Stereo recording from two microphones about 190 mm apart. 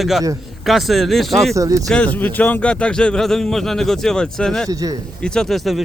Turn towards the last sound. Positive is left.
turn(degrees=0)  # may be behind; listen again after turning